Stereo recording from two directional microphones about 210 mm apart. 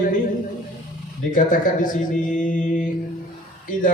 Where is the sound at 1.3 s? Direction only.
40° left (ahead or behind).